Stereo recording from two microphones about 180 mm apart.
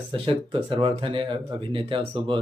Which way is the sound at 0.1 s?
30° right (ahead or behind).